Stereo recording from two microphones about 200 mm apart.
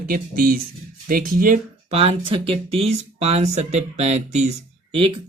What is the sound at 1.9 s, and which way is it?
Speech, 30° right (ahead or behind).